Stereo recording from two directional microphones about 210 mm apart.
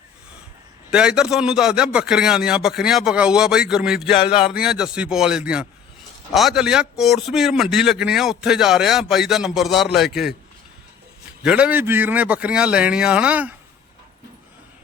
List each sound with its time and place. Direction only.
0.9 s a man's voice: 5° right (ahead or behind)
4.2 s a sound: 25° left (ahead or behind)
4.5 s a man's voice: 5° right (ahead or behind)
11.4 s a man's voice: 5° right (ahead or behind)